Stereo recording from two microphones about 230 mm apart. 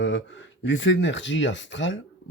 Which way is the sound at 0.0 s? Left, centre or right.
Left.